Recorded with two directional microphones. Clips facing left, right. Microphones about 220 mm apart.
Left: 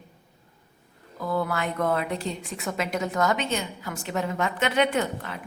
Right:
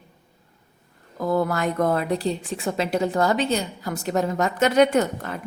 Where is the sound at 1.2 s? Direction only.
45° right (ahead or behind).